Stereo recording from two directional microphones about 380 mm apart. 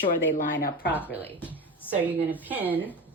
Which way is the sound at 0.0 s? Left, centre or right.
Left.